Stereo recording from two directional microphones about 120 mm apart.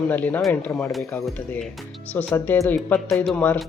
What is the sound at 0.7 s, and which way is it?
Speech, centre (ahead or behind).